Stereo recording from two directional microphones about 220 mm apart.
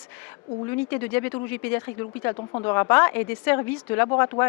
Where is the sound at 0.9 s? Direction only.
10° left (ahead or behind).